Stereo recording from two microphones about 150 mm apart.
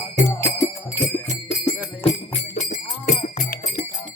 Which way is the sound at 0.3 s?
20° left (ahead or behind).